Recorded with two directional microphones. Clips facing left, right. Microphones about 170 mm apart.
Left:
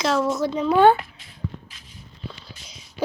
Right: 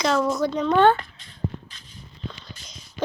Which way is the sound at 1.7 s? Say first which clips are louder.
Even; centre (ahead or behind).